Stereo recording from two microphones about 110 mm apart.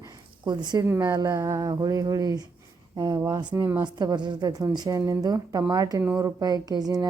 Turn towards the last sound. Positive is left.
turn(degrees=-35)  # may be behind; listen again after turning